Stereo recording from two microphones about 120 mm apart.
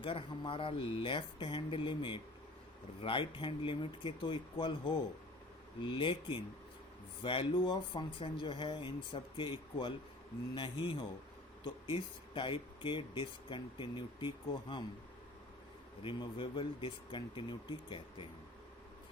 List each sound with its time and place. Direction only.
0.0 s speech: 45° left (ahead or behind)
16.0 s speech: 45° left (ahead or behind)